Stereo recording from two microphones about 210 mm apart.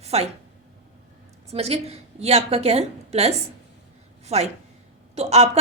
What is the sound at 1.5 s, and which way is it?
A woman's voice, 30° right (ahead or behind).